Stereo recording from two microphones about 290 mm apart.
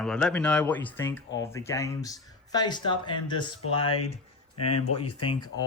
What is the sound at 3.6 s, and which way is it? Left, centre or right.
Speech, left.